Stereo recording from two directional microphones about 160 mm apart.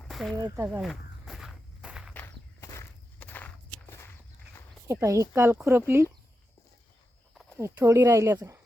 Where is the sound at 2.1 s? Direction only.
15° left (ahead or behind).